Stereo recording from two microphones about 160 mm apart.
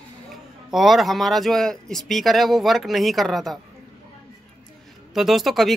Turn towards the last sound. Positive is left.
turn(degrees=0)  # may be behind; listen again after turning